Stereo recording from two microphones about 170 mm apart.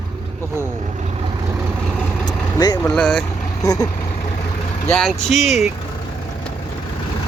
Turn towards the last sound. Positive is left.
turn(degrees=0)  # may be behind; listen again after turning